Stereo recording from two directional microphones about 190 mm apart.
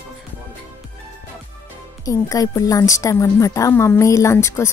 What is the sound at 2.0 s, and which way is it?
A woman's voice, 20° left (ahead or behind).